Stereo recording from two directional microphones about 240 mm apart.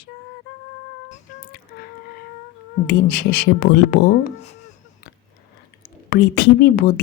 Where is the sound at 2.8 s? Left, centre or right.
Left.